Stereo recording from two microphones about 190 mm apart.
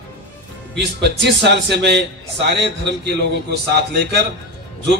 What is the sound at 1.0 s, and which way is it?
A man's voice, 65° right (ahead or behind).